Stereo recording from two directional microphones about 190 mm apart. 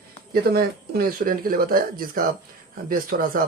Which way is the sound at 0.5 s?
50° right (ahead or behind).